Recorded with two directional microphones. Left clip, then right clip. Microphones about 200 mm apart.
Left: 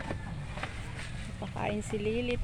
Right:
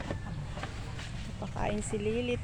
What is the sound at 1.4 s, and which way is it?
Speech, 10° left (ahead or behind).